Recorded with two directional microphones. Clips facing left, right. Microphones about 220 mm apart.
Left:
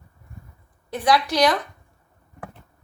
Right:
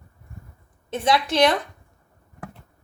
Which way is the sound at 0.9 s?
25° right (ahead or behind).